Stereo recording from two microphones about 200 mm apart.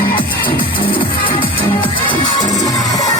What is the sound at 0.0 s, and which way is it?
Music, 25° left (ahead or behind).